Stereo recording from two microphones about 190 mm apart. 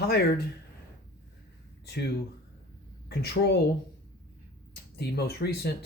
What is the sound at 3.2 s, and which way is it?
Speech, 60° left (ahead or behind).